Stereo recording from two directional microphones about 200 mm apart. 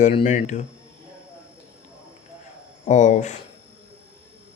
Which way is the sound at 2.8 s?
35° left (ahead or behind).